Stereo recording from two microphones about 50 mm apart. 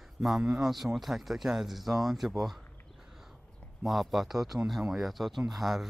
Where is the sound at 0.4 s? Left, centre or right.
Centre.